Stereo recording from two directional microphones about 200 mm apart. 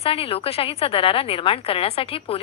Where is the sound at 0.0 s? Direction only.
30° left (ahead or behind).